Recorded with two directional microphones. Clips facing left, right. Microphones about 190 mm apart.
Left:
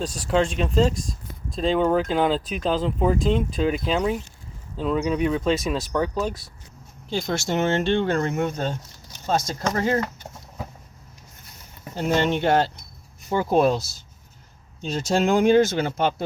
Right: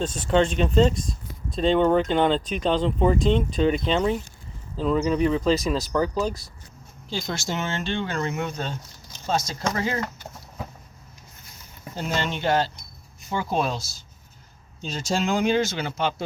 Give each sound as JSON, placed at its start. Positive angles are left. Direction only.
{"t": 0.0, "sound": "speech", "side_deg": 0}
{"t": 7.1, "sound": "speech", "side_deg": 65}
{"t": 12.0, "sound": "speech", "side_deg": 60}
{"t": 13.3, "sound": "speech", "side_deg": 50}